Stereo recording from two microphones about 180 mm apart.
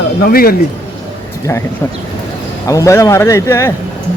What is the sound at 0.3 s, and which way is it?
Speech, 55° left (ahead or behind).